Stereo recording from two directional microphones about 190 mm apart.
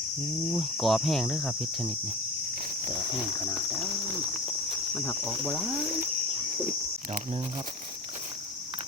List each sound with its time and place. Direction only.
0.5 s cricket: centre (ahead or behind)
4.9 s cricket: 5° left (ahead or behind)